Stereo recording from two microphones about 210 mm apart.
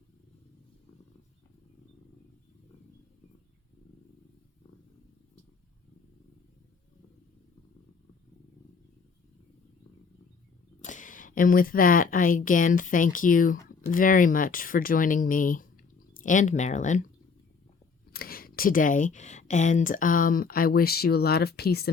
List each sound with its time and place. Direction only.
10.8 s speech: 35° left (ahead or behind)
18.1 s speech: 45° left (ahead or behind)